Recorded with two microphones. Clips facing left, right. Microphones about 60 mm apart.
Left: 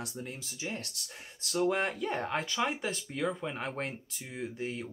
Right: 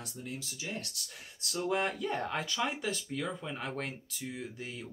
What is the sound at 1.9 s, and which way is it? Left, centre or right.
Speech, centre.